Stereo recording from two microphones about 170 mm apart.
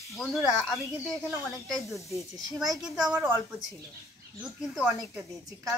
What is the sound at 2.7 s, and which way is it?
Speech, centre (ahead or behind).